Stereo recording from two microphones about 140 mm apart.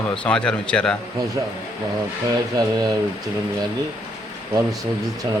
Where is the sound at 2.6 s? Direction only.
25° right (ahead or behind).